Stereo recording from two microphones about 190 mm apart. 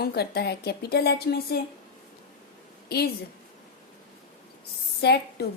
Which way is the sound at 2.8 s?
55° left (ahead or behind).